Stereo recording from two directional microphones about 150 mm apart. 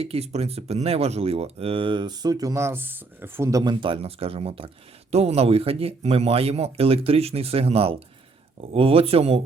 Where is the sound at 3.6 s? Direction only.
30° right (ahead or behind).